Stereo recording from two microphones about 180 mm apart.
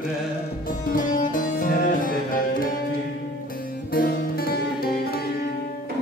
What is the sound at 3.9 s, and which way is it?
Music, 55° left (ahead or behind).